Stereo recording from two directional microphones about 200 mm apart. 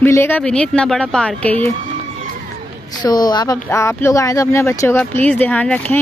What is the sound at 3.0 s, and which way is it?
Speech, 20° left (ahead or behind).